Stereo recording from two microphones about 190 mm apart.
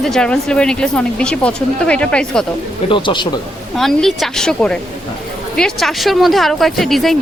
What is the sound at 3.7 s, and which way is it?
Speech, centre (ahead or behind).